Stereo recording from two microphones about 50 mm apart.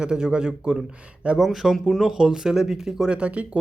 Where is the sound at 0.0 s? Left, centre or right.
Centre.